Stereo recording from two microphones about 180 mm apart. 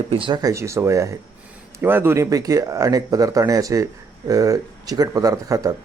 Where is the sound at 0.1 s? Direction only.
25° right (ahead or behind).